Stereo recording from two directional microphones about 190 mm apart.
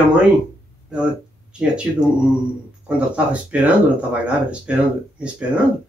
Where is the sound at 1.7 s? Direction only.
5° right (ahead or behind).